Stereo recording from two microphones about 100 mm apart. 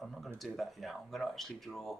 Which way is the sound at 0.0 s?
Centre (ahead or behind).